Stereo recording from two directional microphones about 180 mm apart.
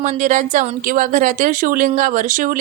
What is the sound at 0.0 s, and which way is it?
Speech, 45° right (ahead or behind).